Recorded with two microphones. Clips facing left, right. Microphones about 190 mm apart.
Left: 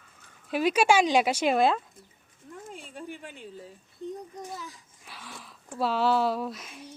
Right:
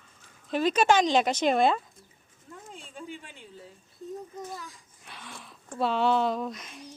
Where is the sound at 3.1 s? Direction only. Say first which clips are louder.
Left 2 dB; 50° left (ahead or behind).